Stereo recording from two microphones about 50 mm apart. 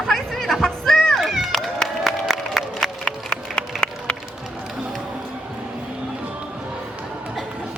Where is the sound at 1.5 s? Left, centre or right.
Centre.